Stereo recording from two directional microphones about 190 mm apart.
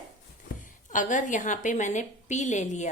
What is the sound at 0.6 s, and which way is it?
A woman's voice, 40° left (ahead or behind).